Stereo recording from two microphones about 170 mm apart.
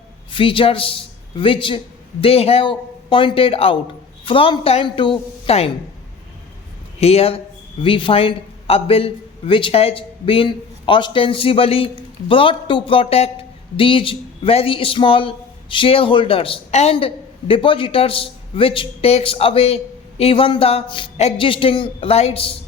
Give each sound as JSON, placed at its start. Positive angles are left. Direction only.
{"t": 0.3, "sound": "a man's voice", "side_deg": 30}
{"t": 7.0, "sound": "a man's voice", "side_deg": 35}